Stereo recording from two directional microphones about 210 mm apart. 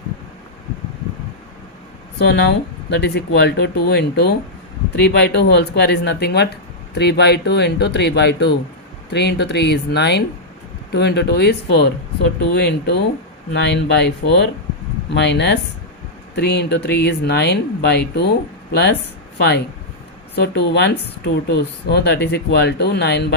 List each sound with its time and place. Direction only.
2.2 s speech: 55° left (ahead or behind)
12.5 s speech: 55° left (ahead or behind)
19.4 s speech: 50° left (ahead or behind)